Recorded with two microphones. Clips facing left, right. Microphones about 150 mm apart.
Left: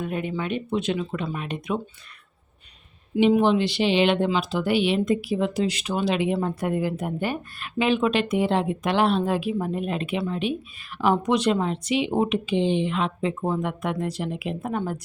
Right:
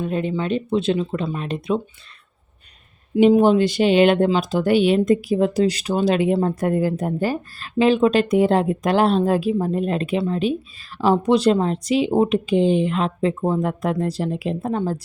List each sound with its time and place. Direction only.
0.0 s speech: 30° right (ahead or behind)
3.2 s speech: 40° right (ahead or behind)